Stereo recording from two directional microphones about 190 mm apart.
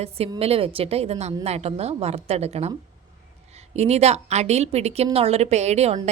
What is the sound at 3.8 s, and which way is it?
A woman's voice, 35° right (ahead or behind).